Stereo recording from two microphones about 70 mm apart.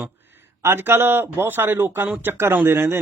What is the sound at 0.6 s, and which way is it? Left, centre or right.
Speech, right.